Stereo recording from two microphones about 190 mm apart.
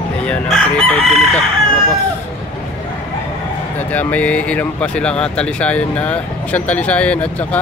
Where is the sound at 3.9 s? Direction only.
10° left (ahead or behind).